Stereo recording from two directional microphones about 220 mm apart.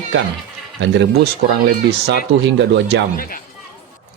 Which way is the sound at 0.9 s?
50° right (ahead or behind).